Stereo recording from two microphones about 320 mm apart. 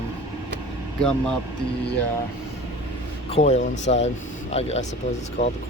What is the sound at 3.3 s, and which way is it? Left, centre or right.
Speech, left.